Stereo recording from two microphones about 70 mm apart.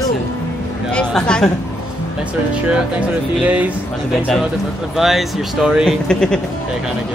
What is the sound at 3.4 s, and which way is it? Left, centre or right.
Speech, right.